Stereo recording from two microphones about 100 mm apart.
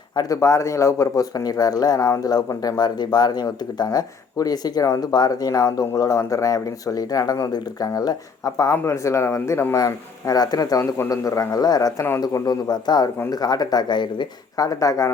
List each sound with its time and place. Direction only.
0.2 s speech: 35° left (ahead or behind)
9.7 s speech: 40° left (ahead or behind)
14.6 s speech: 35° left (ahead or behind)